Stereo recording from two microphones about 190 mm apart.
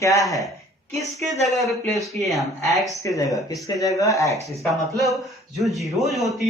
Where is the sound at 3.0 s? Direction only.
15° left (ahead or behind).